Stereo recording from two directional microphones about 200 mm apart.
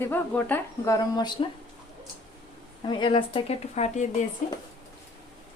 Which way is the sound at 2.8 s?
25° left (ahead or behind).